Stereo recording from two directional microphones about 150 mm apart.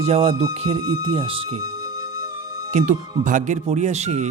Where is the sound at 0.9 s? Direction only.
35° right (ahead or behind).